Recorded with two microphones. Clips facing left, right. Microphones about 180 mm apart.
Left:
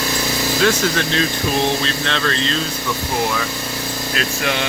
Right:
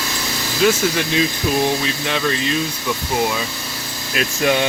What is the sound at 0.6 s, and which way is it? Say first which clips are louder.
Speech: right 2 dB; 10° right (ahead or behind).